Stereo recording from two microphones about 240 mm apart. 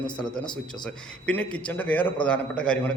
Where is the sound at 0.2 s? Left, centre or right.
Centre.